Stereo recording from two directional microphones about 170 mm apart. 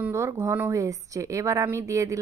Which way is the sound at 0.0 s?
15° right (ahead or behind).